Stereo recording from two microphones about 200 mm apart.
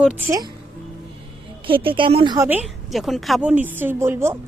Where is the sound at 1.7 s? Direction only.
25° right (ahead or behind).